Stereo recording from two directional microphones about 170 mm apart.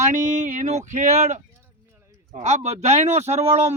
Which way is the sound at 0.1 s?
45° right (ahead or behind).